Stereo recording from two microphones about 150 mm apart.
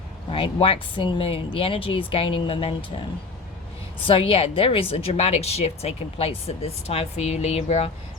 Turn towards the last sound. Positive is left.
turn(degrees=45)  # may be behind; listen again after turning